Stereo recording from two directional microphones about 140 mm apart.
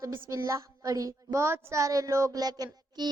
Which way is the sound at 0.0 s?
25° right (ahead or behind).